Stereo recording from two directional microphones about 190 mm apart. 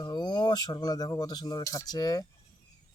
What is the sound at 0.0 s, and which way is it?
Speech, 20° left (ahead or behind).